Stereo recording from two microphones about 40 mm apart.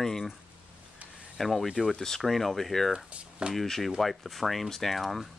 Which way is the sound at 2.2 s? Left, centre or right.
Centre.